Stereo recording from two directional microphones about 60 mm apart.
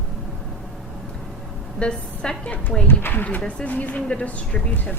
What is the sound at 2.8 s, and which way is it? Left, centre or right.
Speech, left.